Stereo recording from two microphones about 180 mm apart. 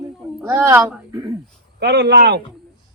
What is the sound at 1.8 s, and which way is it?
Speech, 70° right (ahead or behind).